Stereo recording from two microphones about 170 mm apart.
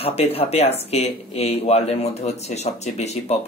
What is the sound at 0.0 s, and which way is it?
Speech, 35° left (ahead or behind).